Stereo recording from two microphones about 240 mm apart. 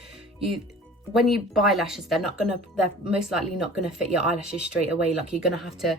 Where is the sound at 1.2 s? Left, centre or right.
Centre.